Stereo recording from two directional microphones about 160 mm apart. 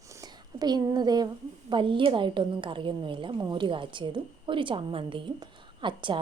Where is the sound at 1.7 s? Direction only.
30° right (ahead or behind).